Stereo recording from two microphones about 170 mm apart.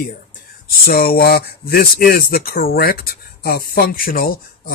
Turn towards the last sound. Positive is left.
turn(degrees=60)  # may be behind; listen again after turning